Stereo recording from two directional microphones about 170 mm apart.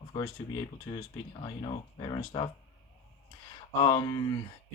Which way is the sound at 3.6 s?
25° left (ahead or behind).